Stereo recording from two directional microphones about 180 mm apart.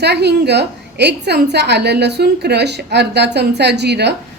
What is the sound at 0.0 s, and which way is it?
A woman's voice, 65° right (ahead or behind).